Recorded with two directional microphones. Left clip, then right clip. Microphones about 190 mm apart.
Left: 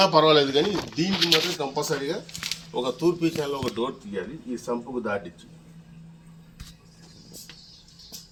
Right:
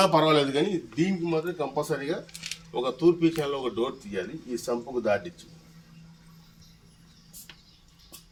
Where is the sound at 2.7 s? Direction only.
15° right (ahead or behind).